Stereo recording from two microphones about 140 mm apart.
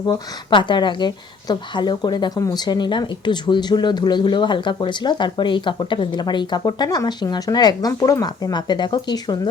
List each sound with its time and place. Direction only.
0.0 s a woman's voice: 35° left (ahead or behind)